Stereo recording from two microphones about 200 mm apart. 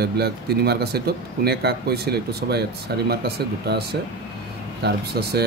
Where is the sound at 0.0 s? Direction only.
50° right (ahead or behind).